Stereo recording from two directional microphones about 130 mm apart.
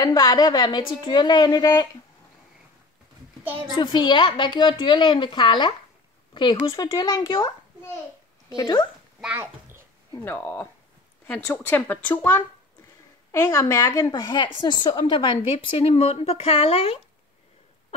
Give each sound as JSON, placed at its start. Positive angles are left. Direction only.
{"t": 0.0, "sound": "a woman's voice", "side_deg": 30}
{"t": 3.7, "sound": "a woman's voice", "side_deg": 35}
{"t": 9.2, "sound": "a child's voice", "side_deg": -15}
{"t": 10.1, "sound": "a woman's voice", "side_deg": 15}